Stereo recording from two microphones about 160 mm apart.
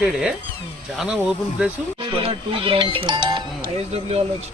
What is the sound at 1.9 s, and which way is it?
Speech, 35° right (ahead or behind).